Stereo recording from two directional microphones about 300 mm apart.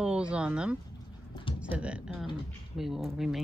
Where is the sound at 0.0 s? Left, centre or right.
Centre.